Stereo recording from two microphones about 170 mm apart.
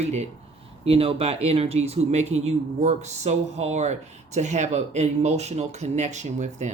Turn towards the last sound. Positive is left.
turn(degrees=-45)  # may be behind; listen again after turning